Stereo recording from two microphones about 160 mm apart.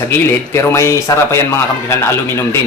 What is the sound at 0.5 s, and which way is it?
A man's voice, 15° left (ahead or behind).